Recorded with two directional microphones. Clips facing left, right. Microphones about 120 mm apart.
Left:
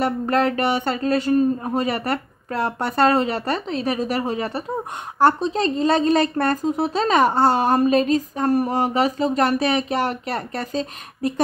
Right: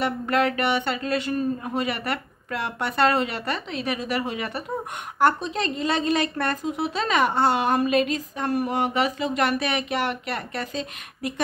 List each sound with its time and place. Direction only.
0.0 s speech: 40° left (ahead or behind)